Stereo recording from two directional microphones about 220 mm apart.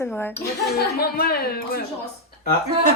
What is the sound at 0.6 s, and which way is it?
Speech, 45° left (ahead or behind).